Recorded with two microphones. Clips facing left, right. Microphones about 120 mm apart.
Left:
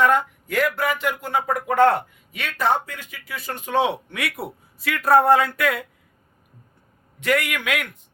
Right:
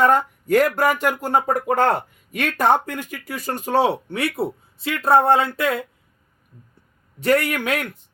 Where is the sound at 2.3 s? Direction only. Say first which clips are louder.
Right 4 dB; 50° right (ahead or behind); by 5.8 s 25° right (ahead or behind).